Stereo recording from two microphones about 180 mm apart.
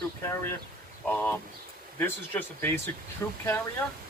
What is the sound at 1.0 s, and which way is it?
Speech, 10° left (ahead or behind).